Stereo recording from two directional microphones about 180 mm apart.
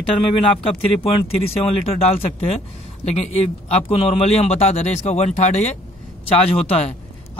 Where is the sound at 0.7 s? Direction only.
35° left (ahead or behind).